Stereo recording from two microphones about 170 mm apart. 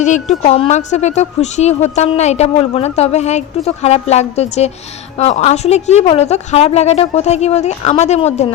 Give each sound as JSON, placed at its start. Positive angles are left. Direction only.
{"t": 0.0, "sound": "a woman's voice", "side_deg": 45}